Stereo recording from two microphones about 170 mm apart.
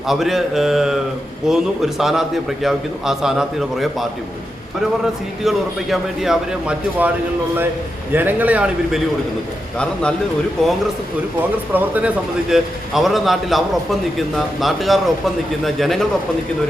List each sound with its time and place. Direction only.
0.1 s a man's voice: centre (ahead or behind)
5.4 s a man's voice: centre (ahead or behind)
8.1 s a man's voice: 10° right (ahead or behind)
9.7 s a man's voice: 5° left (ahead or behind)
11.7 s a man's voice: 10° right (ahead or behind)